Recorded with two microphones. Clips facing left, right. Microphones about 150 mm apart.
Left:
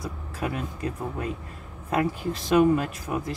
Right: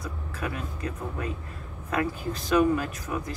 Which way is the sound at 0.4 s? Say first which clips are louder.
Left 3 dB; 30° left (ahead or behind).